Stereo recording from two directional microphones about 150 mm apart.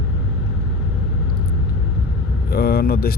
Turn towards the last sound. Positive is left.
turn(degrees=90)